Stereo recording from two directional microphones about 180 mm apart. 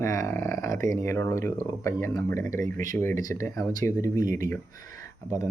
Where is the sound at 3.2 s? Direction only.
45° right (ahead or behind).